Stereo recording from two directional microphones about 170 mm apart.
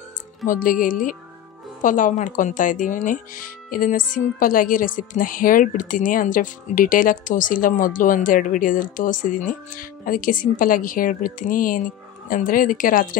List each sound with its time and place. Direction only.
0.5 s speech: 50° left (ahead or behind)